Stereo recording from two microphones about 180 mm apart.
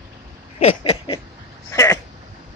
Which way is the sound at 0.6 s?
35° left (ahead or behind).